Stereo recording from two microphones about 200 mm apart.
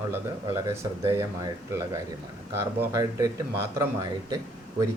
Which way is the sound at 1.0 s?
15° right (ahead or behind).